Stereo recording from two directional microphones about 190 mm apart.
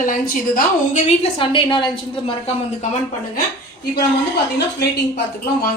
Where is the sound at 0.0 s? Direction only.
45° left (ahead or behind); by 2.3 s 25° left (ahead or behind).